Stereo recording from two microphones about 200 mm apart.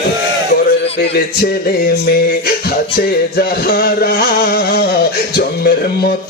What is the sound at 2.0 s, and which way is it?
Music, 50° left (ahead or behind).